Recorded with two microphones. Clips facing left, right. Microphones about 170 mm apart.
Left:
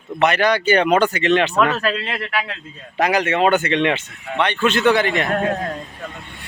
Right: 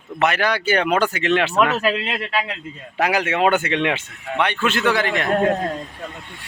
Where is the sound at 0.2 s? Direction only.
5° right (ahead or behind).